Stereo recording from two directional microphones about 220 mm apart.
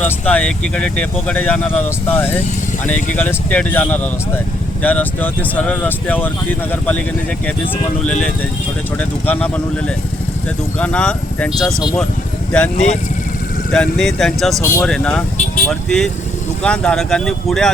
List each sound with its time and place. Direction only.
0.0 s speech: 5° left (ahead or behind)
12.7 s speech: 35° left (ahead or behind)
13.7 s speech: 5° left (ahead or behind)